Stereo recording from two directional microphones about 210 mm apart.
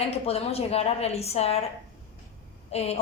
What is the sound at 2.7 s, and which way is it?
Speech, 30° left (ahead or behind).